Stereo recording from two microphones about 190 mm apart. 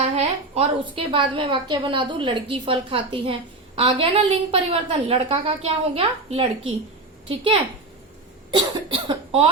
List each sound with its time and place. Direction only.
0.2 s a woman's voice: 30° right (ahead or behind)